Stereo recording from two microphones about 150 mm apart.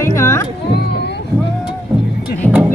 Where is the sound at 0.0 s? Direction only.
15° left (ahead or behind).